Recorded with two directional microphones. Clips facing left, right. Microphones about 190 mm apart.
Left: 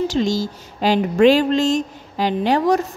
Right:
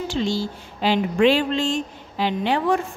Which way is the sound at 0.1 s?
40° left (ahead or behind).